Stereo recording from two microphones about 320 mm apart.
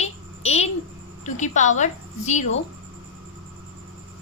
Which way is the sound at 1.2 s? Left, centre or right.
Left.